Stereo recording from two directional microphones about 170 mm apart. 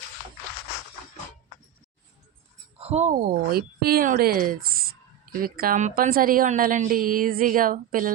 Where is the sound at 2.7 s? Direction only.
40° right (ahead or behind).